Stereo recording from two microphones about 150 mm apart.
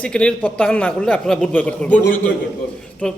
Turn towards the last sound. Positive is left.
turn(degrees=5)  # may be behind; listen again after turning